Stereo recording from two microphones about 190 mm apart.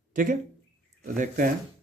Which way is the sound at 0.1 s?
45° right (ahead or behind).